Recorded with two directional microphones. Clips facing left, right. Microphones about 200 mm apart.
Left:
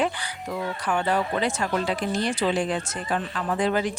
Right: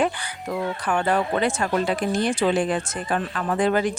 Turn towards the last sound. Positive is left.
turn(degrees=-55)  # may be behind; listen again after turning